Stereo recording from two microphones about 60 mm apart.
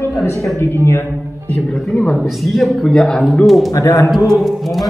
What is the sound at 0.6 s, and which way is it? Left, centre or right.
Speech, left.